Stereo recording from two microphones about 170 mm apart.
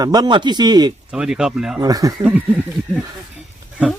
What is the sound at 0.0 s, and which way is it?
Speech, 25° right (ahead or behind).